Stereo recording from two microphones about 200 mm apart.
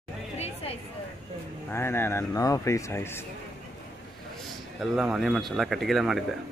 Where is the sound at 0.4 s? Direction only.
30° left (ahead or behind).